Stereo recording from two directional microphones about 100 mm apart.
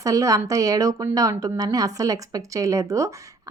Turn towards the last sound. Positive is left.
turn(degrees=-35)  # may be behind; listen again after turning